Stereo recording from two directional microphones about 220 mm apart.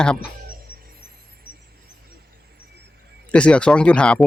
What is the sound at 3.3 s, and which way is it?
Speech, 5° left (ahead or behind).